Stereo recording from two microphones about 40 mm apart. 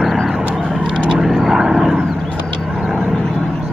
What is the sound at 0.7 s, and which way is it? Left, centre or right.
Vehicle, centre.